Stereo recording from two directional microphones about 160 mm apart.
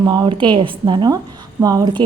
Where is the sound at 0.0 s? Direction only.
25° right (ahead or behind).